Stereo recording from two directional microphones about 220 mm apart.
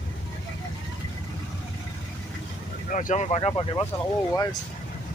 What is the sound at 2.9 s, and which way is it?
Speech, 35° left (ahead or behind).